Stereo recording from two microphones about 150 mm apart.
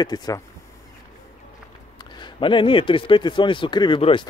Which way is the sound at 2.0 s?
30° left (ahead or behind).